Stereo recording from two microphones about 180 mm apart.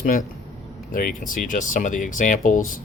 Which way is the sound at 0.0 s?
50° left (ahead or behind).